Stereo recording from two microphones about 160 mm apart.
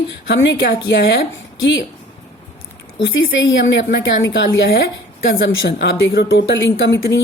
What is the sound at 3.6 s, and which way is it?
Speech, 90° left.